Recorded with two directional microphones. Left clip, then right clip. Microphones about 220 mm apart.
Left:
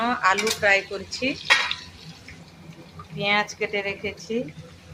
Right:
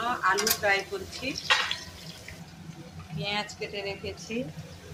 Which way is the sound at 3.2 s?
15° left (ahead or behind).